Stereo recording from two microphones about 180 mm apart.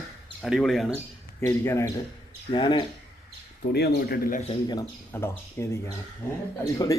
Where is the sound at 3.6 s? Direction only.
60° left (ahead or behind).